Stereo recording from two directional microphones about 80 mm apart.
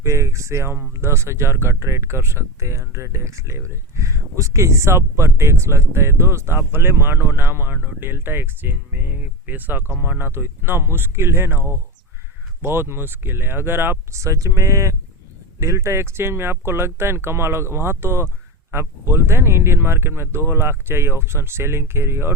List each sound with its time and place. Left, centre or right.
0.0 s speech: right